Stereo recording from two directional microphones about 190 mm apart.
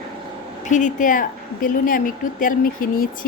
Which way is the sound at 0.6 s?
40° left (ahead or behind).